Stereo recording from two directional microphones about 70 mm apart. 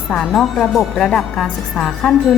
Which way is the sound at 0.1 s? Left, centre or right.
Centre.